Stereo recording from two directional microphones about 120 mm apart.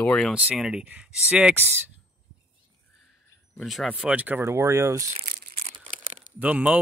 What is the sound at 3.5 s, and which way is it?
Speech, centre (ahead or behind).